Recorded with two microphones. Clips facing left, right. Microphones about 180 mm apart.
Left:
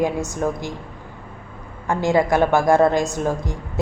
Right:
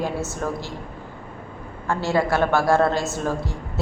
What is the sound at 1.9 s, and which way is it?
A woman's voice, 15° left (ahead or behind).